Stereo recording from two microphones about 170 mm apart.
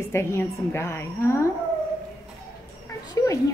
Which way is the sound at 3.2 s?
15° left (ahead or behind).